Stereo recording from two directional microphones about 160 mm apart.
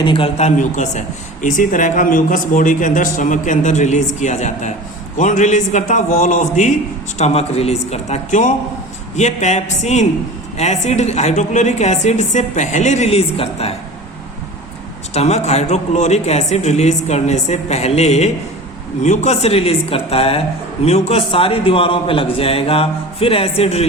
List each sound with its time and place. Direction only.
0.0 s a man's voice: 30° left (ahead or behind); by 6.7 s 50° left (ahead or behind)
7.2 s a man's voice: 40° left (ahead or behind)
15.1 s a man's voice: 40° left (ahead or behind)